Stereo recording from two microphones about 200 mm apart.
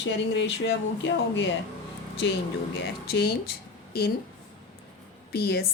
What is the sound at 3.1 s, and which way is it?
Speech, 50° left (ahead or behind).